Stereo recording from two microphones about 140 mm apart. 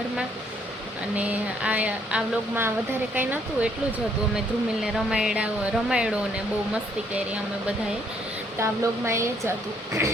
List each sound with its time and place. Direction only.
1.1 s speech: 10° right (ahead or behind)
8.5 s speech: 20° right (ahead or behind)